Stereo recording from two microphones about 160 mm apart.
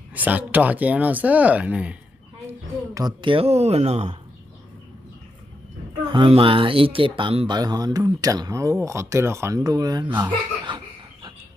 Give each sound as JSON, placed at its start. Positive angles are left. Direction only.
{"t": 0.1, "sound": "speech", "side_deg": -10}
{"t": 2.9, "sound": "speech", "side_deg": -25}
{"t": 6.1, "sound": "speech", "side_deg": -30}
{"t": 10.2, "sound": "chuckle", "side_deg": -30}